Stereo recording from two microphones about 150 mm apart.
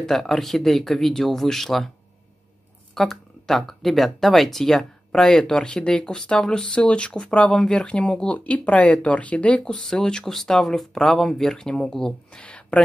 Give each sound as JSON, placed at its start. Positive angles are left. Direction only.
{"t": 0.0, "sound": "speech", "side_deg": 0}
{"t": 2.9, "sound": "speech", "side_deg": 0}